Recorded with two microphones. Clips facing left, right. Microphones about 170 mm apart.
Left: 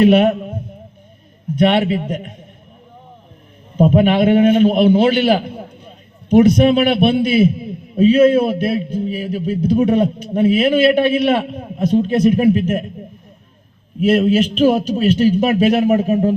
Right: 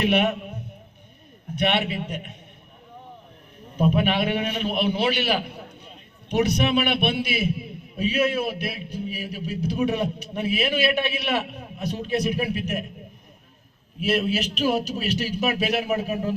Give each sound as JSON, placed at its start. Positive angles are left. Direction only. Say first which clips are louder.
{"t": 0.0, "sound": "a man's voice", "louder": "left 10 dB", "side_deg": 45}
{"t": 3.8, "sound": "a man's voice", "louder": "left 9 dB", "side_deg": 50}
{"t": 14.0, "sound": "a man's voice", "louder": "left 10 dB", "side_deg": 50}